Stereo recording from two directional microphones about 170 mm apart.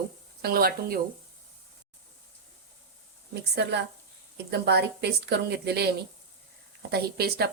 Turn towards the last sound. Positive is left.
turn(degrees=-70)  # may be behind; listen again after turning